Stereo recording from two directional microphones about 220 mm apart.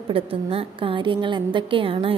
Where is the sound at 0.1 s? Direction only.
25° right (ahead or behind).